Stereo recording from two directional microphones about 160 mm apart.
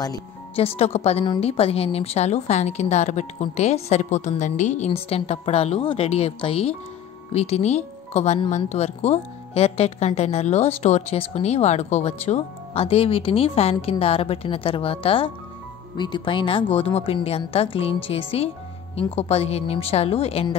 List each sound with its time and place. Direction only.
0.6 s speech: 40° left (ahead or behind)